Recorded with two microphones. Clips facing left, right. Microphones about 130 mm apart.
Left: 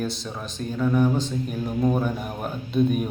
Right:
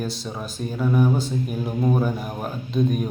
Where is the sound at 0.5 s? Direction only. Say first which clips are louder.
Even; 10° right (ahead or behind).